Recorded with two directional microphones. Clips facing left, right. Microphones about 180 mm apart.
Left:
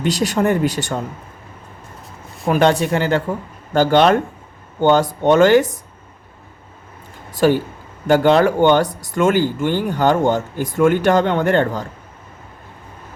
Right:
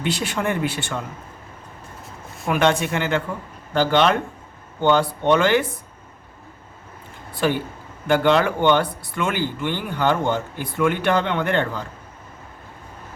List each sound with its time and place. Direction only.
0.0 s speech: 40° left (ahead or behind)
2.5 s speech: 35° left (ahead or behind)
7.4 s speech: 40° left (ahead or behind)